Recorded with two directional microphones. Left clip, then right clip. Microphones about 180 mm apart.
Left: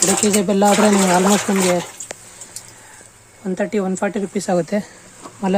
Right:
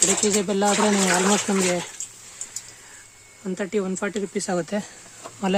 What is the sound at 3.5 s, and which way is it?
Speech, 10° left (ahead or behind).